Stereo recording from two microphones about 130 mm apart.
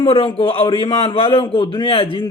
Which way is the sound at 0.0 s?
45° left (ahead or behind).